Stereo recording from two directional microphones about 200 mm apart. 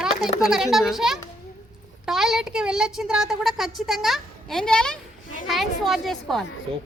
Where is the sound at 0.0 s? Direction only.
5° right (ahead or behind).